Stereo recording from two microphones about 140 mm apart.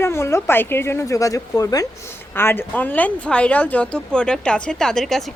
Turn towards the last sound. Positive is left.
turn(degrees=0)  # may be behind; listen again after turning